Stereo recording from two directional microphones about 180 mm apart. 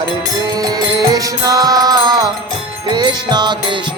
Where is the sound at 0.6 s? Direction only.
20° right (ahead or behind).